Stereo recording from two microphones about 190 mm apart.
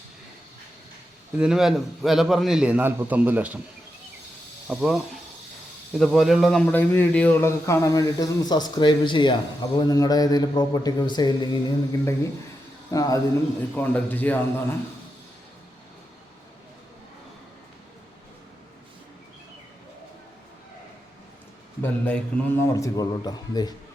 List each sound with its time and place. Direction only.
1.4 s a man's voice: 5° right (ahead or behind)
4.7 s a man's voice: centre (ahead or behind); by 11.6 s 20° left (ahead or behind)
12.9 s a man's voice: 20° left (ahead or behind)
21.8 s a man's voice: 10° left (ahead or behind)